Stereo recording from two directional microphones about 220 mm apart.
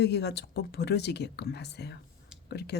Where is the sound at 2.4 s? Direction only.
50° left (ahead or behind).